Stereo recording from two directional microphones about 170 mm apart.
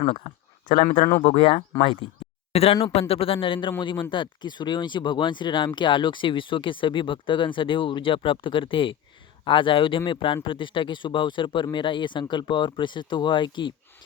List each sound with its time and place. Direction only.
0.0 s speech: 40° left (ahead or behind)